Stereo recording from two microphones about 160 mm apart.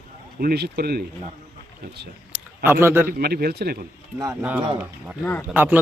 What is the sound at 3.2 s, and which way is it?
Speech, 75° right (ahead or behind).